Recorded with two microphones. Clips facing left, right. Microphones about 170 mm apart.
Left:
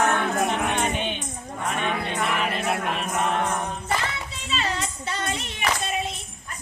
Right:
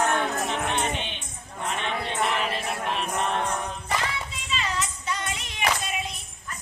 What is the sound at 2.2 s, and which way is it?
Music, 55° left (ahead or behind).